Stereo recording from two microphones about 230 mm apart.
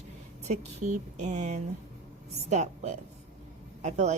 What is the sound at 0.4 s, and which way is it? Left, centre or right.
A woman's voice, right.